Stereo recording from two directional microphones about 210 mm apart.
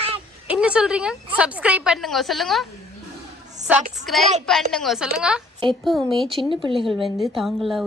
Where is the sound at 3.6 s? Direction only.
35° right (ahead or behind).